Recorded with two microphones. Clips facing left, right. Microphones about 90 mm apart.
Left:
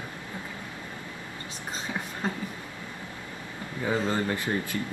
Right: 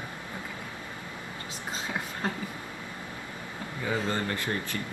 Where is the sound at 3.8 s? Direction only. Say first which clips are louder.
Left 3 dB; 15° left (ahead or behind).